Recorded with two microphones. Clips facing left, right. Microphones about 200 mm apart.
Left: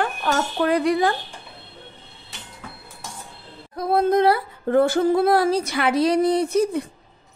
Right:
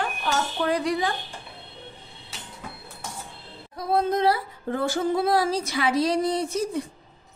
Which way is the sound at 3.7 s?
60° left (ahead or behind).